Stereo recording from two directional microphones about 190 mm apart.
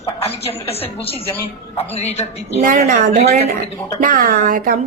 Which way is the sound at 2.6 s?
40° right (ahead or behind).